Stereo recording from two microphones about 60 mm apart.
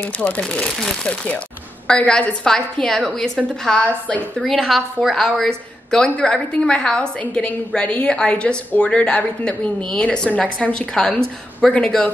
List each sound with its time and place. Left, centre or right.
0.5 s a woman's voice: centre